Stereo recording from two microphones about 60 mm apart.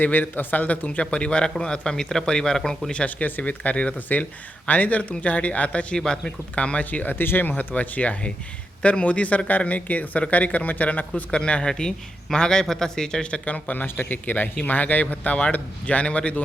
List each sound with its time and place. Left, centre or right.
0.0 s a man's voice: left; by 2.9 s centre
2.9 s speech: centre; by 7.5 s left
7.5 s speech: left
11.1 s a man's voice: centre
13.4 s speech: left